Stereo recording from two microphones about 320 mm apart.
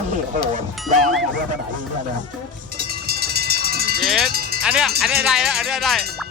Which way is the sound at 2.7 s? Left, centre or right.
Right.